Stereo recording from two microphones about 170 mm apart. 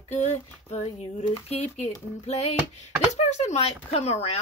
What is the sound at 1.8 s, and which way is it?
Speech, 40° left (ahead or behind).